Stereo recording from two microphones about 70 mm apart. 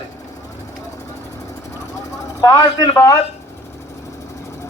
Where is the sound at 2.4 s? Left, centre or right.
Left.